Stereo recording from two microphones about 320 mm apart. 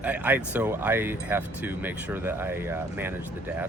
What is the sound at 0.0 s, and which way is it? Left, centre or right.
Speech, centre.